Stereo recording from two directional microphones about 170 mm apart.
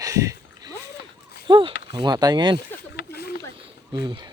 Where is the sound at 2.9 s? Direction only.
70° left (ahead or behind).